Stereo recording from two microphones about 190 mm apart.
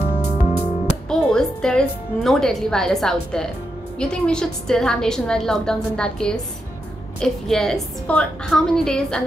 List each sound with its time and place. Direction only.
0.3 s music: 35° left (ahead or behind)
1.0 s a woman's voice: 5° left (ahead or behind)